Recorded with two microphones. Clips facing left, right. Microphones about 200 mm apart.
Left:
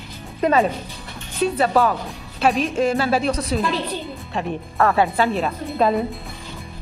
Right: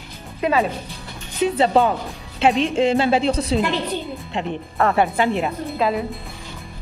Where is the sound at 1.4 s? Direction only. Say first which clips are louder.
Right 1 dB; 25° right (ahead or behind).